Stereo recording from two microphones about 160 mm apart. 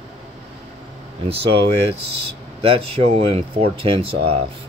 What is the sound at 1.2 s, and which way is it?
Speech, 35° right (ahead or behind).